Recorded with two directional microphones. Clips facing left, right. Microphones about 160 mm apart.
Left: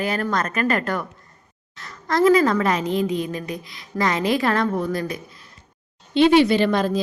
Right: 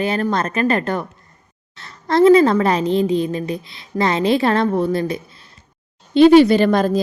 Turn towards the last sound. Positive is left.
turn(degrees=-45)  # may be behind; listen again after turning